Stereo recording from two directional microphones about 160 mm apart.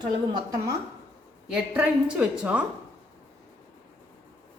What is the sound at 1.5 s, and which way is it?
A woman's voice, 5° right (ahead or behind).